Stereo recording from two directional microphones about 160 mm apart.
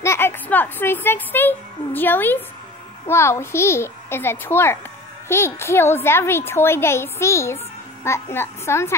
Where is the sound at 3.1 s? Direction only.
15° left (ahead or behind).